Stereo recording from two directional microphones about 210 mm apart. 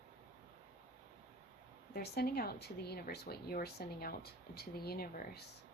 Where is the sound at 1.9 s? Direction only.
50° left (ahead or behind).